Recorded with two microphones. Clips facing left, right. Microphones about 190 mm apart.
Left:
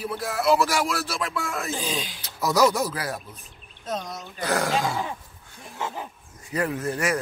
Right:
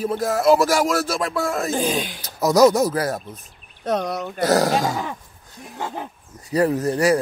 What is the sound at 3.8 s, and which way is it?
Speech, 65° right (ahead or behind).